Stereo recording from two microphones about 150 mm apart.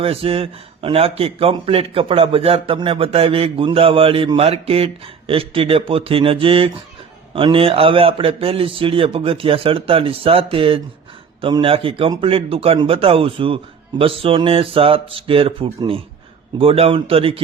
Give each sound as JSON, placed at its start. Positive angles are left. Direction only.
{"t": 0.0, "sound": "a man's voice", "side_deg": -40}